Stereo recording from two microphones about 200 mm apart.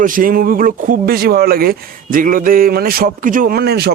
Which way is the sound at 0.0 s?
45° right (ahead or behind).